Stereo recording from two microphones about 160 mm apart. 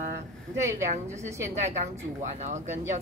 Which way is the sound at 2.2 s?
45° right (ahead or behind).